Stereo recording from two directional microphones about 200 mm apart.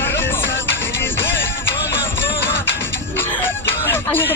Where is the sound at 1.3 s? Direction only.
60° left (ahead or behind).